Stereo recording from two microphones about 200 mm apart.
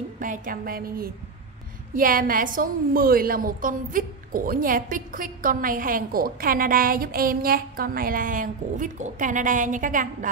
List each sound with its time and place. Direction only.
0.2 s a woman's voice: 45° right (ahead or behind)